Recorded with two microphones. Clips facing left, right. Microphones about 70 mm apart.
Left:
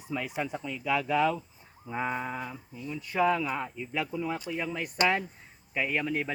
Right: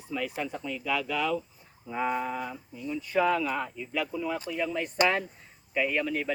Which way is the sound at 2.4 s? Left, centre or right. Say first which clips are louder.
Right 3 dB; centre.